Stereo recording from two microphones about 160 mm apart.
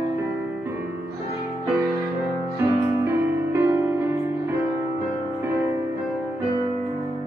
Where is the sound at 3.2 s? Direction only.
15° right (ahead or behind).